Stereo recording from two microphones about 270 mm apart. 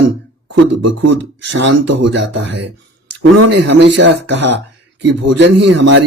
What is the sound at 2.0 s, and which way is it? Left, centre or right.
Speech, right.